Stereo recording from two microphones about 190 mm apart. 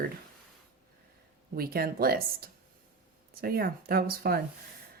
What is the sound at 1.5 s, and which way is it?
Speech, 50° right (ahead or behind).